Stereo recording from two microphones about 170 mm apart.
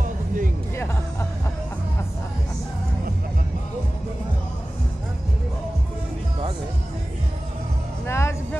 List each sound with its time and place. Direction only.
8.1 s music: 15° left (ahead or behind)